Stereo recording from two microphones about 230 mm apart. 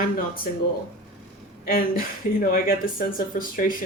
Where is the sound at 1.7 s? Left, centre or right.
Left.